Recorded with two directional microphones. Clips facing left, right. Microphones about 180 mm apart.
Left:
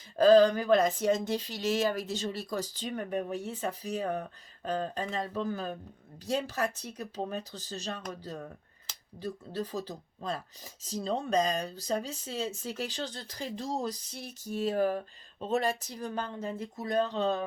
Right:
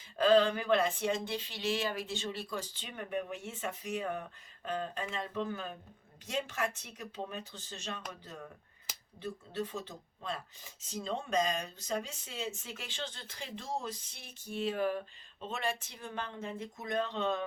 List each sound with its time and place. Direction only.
0.2 s speech: 40° left (ahead or behind)
9.2 s speech: 35° left (ahead or behind)